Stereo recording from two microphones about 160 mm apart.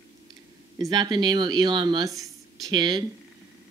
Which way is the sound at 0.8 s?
25° right (ahead or behind).